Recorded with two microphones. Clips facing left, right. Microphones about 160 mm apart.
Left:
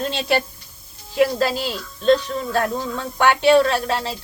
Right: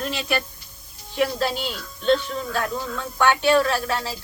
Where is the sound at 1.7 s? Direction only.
35° left (ahead or behind).